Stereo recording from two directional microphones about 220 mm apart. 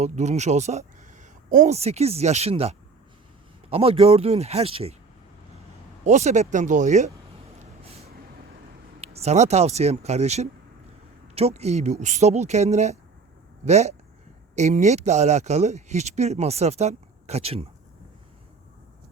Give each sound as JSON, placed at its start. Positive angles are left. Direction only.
{"t": 0.0, "sound": "speech", "side_deg": -30}
{"t": 6.1, "sound": "speech", "side_deg": -30}
{"t": 7.9, "sound": "vehicle", "side_deg": -30}
{"t": 9.0, "sound": "speech", "side_deg": -30}